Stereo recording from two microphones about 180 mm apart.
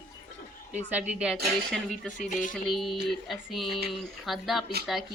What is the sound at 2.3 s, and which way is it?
Music, 45° left (ahead or behind).